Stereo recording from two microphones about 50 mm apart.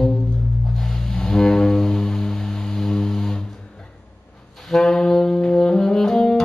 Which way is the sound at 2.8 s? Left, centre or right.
Centre.